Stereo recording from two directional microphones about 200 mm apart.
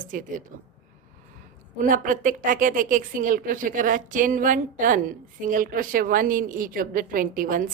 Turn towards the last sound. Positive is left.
turn(degrees=-45)  # may be behind; listen again after turning